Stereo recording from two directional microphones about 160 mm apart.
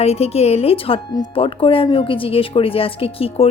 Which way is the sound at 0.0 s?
40° left (ahead or behind).